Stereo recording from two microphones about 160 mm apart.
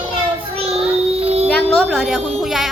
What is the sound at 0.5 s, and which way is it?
Child singing, 40° right (ahead or behind).